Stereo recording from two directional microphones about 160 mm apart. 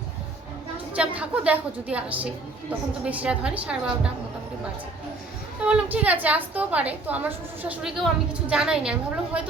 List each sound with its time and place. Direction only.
0.9 s a woman's voice: 10° right (ahead or behind)
5.6 s a woman's voice: 10° right (ahead or behind)